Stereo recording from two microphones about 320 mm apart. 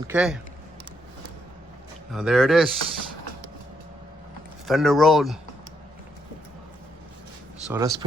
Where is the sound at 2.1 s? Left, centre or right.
Centre.